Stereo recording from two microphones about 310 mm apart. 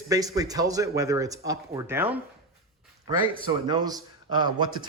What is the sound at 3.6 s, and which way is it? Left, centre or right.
Speech, centre.